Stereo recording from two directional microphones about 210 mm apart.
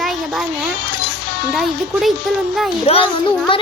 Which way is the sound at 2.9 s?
30° left (ahead or behind).